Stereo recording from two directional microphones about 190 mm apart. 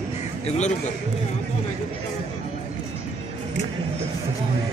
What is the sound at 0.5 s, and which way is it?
Speech, 40° left (ahead or behind).